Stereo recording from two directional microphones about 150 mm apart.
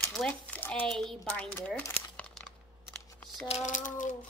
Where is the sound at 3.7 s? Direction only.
60° left (ahead or behind).